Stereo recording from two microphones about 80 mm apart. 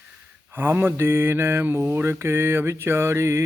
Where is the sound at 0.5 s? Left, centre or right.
Right.